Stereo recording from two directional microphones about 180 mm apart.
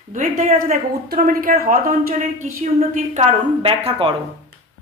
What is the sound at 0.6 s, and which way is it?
Speech, 50° right (ahead or behind).